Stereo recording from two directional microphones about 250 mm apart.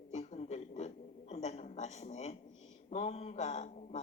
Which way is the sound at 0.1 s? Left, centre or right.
Left.